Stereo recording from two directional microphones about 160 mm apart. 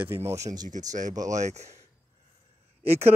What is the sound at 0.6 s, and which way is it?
Speech, 50° right (ahead or behind).